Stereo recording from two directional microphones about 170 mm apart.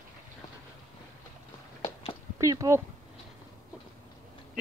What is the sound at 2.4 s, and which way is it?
Speech, 20° right (ahead or behind).